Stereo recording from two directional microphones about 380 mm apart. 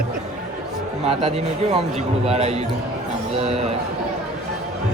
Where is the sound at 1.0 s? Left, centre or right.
Centre.